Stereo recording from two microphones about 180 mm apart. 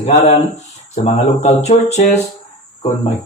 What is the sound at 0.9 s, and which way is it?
A man's voice, 35° left (ahead or behind).